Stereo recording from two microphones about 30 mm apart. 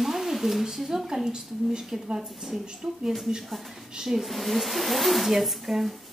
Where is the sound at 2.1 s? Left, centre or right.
Right.